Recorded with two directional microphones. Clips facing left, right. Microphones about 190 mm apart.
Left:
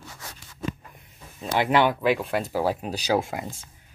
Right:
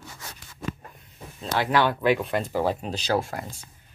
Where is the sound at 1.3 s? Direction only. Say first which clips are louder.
Left 2 dB; 20° left (ahead or behind).